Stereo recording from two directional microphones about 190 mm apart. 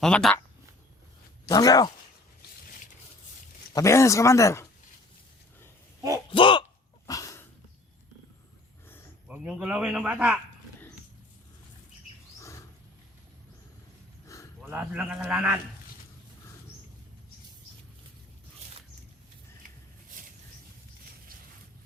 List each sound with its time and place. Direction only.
0.0 s a man's voice: 5° left (ahead or behind)
1.5 s speech: 20° left (ahead or behind)
3.8 s speech: 15° left (ahead or behind)
6.3 s a sound: 25° left (ahead or behind)
7.1 s dog: 20° left (ahead or behind)
9.2 s a man's voice: 5° right (ahead or behind)
12.4 s a sound: 15° left (ahead or behind)
14.6 s a man's voice: 5° right (ahead or behind)